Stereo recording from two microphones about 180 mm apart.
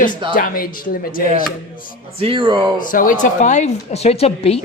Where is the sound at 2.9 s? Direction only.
50° left (ahead or behind).